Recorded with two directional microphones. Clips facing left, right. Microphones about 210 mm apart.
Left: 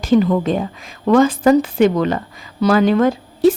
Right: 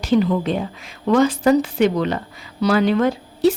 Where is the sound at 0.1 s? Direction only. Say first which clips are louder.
Left 3 dB; 50° left (ahead or behind).